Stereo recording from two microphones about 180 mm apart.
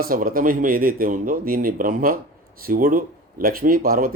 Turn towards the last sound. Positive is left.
turn(degrees=-55)  # may be behind; listen again after turning